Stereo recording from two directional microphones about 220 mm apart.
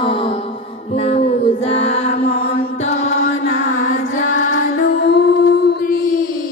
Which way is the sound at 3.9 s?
35° left (ahead or behind).